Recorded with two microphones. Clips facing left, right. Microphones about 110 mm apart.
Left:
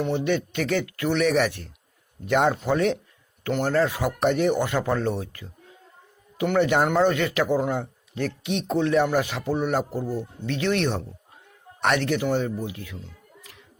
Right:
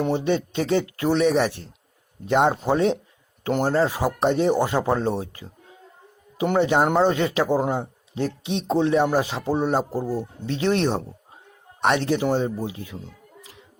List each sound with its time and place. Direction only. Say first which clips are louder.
0.0 s speech: right 2 dB; 30° right (ahead or behind)